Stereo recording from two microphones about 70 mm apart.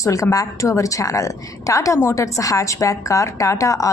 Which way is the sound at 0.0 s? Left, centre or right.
Left.